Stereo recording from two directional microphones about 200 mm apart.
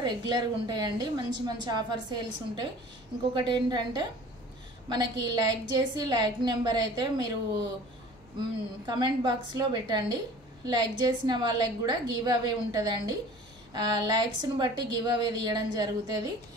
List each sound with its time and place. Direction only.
0.0 s a woman's voice: 20° right (ahead or behind)
8.4 s a woman's voice: 20° right (ahead or behind)